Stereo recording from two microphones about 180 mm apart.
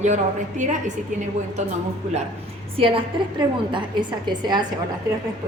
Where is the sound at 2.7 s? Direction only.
30° right (ahead or behind).